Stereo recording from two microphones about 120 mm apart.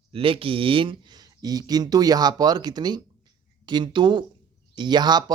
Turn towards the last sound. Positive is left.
turn(degrees=-35)  # may be behind; listen again after turning